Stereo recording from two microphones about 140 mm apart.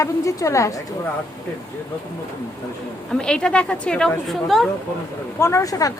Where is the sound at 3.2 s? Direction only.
5° left (ahead or behind).